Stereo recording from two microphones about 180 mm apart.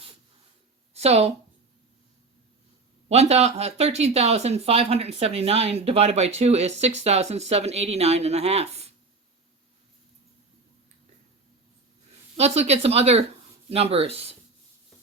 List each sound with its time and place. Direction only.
0.9 s speech: 35° right (ahead or behind)
3.1 s speech: 35° right (ahead or behind)
12.4 s speech: 35° right (ahead or behind)